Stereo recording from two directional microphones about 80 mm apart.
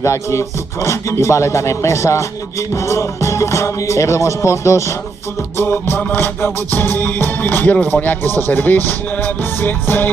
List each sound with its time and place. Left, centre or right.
0.0 s music: left